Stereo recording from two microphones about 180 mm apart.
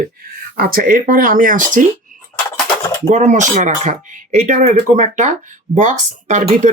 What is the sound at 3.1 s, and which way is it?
Speech, 40° right (ahead or behind).